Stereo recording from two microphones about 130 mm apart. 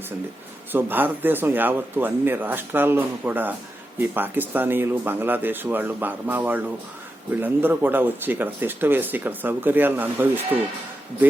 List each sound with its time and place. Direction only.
0.7 s speech: 15° right (ahead or behind)